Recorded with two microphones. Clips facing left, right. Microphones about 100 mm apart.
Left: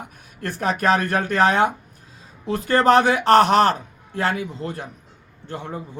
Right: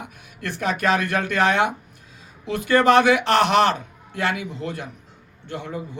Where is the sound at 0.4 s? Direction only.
45° left (ahead or behind).